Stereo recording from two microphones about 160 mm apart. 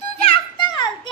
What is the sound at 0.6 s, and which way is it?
Children playing, 30° left (ahead or behind).